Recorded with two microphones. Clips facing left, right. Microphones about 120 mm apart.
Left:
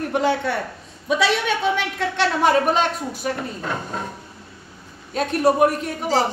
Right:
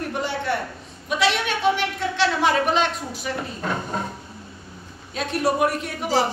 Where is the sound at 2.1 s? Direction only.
45° left (ahead or behind).